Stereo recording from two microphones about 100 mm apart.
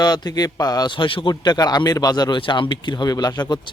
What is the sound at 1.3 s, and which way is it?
A man's voice, 40° left (ahead or behind).